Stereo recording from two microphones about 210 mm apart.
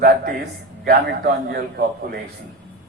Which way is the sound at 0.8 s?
45° right (ahead or behind).